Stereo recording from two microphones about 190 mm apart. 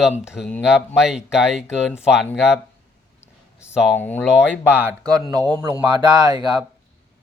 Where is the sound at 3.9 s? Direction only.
10° left (ahead or behind).